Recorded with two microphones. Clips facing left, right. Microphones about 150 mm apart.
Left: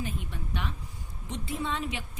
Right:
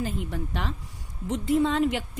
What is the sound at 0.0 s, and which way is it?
A woman's voice, 90° right.